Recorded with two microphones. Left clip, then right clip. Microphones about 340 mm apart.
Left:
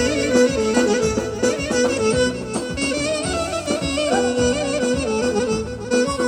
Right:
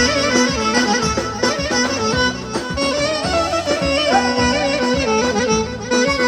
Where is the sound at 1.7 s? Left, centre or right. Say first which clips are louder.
Even; centre.